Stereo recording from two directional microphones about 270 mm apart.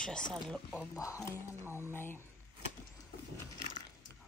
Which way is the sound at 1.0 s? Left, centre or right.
Centre.